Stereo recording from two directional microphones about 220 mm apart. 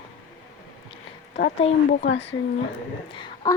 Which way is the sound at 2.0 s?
55° left (ahead or behind).